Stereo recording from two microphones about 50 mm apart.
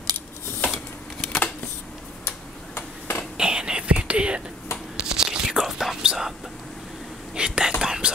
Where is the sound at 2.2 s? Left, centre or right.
Left.